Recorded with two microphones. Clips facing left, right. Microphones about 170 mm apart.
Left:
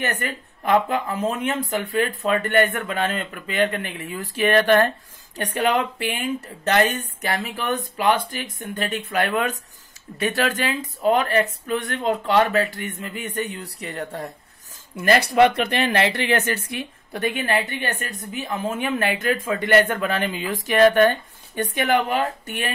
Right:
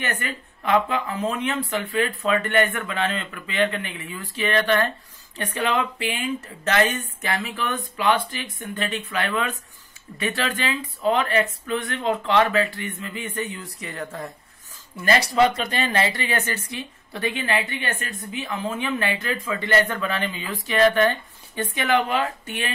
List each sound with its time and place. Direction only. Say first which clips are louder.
0.0 s speech: left 2 dB; 40° left (ahead or behind)
15.0 s speech: left 3 dB; 60° left (ahead or behind); by 22.7 s 40° left (ahead or behind)